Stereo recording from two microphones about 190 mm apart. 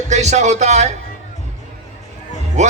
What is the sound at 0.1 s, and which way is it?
Speech, 35° right (ahead or behind).